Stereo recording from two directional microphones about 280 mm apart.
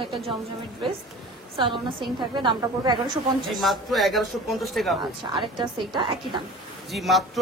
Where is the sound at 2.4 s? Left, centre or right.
Centre.